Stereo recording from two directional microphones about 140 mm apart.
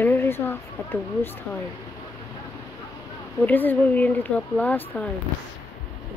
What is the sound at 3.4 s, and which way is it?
Speech, 10° left (ahead or behind).